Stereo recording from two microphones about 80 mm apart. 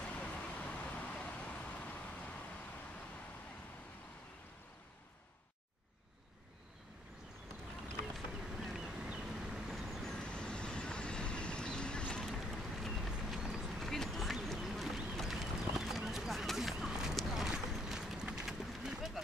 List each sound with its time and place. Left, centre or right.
0.0 s vehicle: centre
8.1 s vehicle: centre
12.3 s vehicle: centre
13.3 s run: centre